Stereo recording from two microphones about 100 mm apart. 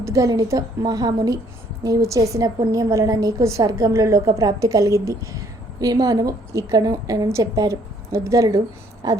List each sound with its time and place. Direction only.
0.0 s a woman's voice: 35° right (ahead or behind)